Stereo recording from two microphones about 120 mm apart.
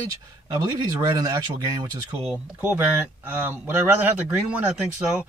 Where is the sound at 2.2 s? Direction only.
10° right (ahead or behind).